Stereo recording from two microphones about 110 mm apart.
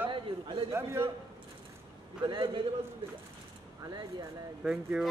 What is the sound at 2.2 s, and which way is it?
Speech, 45° right (ahead or behind).